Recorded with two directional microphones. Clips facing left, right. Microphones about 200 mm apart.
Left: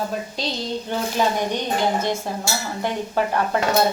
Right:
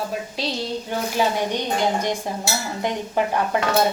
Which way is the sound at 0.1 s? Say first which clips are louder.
Even; 5° right (ahead or behind).